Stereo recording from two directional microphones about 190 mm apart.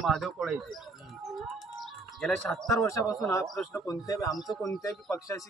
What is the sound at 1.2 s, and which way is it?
Bird, centre (ahead or behind).